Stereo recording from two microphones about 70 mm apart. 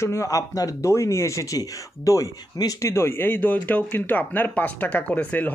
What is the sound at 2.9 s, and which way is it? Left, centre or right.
Speech, left.